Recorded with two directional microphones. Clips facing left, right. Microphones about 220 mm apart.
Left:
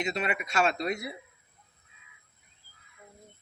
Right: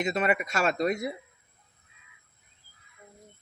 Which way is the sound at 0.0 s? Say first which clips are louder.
Right 4 dB; 50° right (ahead or behind).